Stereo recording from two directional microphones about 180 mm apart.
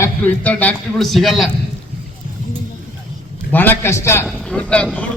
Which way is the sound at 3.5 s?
10° left (ahead or behind).